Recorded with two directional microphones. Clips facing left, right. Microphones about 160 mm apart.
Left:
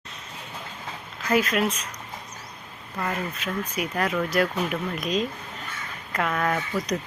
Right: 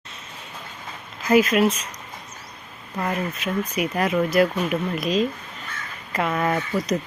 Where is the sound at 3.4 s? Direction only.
10° right (ahead or behind).